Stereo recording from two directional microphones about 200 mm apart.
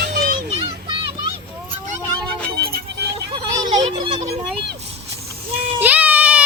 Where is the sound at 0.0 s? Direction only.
55° right (ahead or behind).